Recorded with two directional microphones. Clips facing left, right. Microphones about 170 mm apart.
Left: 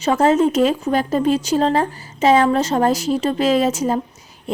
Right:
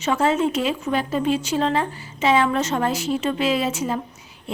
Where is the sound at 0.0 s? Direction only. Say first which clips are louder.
Left 5 dB; 40° left (ahead or behind).